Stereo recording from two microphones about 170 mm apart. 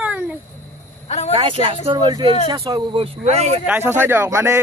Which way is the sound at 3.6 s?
10° right (ahead or behind).